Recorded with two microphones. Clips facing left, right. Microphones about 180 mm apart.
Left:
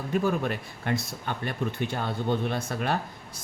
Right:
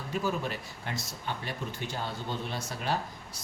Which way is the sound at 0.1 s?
55° left (ahead or behind).